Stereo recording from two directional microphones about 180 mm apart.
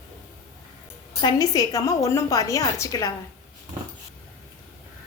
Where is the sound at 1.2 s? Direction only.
20° left (ahead or behind).